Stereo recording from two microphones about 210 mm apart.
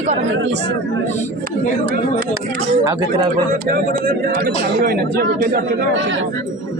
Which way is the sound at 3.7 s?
40° right (ahead or behind).